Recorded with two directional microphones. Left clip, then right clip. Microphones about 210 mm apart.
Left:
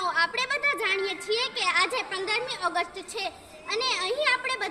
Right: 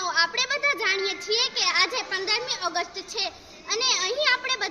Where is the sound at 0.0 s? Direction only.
Centre (ahead or behind).